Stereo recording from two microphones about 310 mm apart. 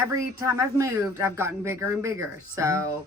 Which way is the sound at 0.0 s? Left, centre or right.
Centre.